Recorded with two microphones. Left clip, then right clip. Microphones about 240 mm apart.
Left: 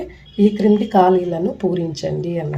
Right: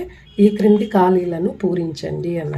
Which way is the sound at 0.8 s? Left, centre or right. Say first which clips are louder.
Left 2 dB; centre.